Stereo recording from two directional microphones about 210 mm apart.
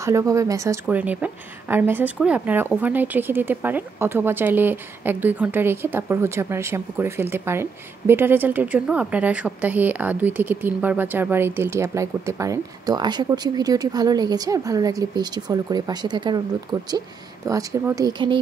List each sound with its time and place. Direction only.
0.0 s a woman's voice: 15° right (ahead or behind)